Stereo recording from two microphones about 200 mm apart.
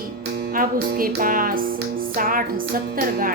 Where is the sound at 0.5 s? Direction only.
45° right (ahead or behind).